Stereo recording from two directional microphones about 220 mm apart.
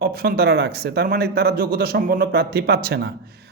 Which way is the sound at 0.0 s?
45° right (ahead or behind).